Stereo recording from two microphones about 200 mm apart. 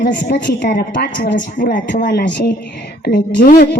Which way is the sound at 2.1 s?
55° left (ahead or behind).